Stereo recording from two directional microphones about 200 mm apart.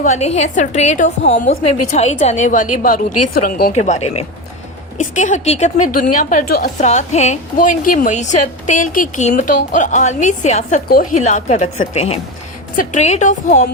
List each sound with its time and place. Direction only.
0.0 s a woman's voice: 35° left (ahead or behind)
6.7 s a woman's voice: 35° left (ahead or behind)
10.8 s a woman's voice: 45° left (ahead or behind)